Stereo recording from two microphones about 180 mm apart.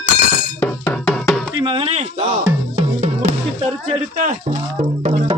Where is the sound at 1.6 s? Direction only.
30° right (ahead or behind).